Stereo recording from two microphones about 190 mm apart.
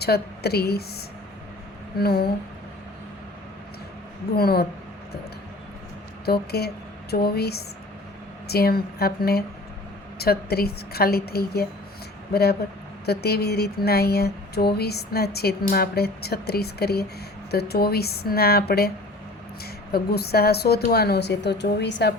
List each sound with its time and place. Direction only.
0.0 s speech: 60° left (ahead or behind)
2.0 s speech: 55° left (ahead or behind)
4.4 s speech: 55° left (ahead or behind)
6.2 s speech: 55° left (ahead or behind)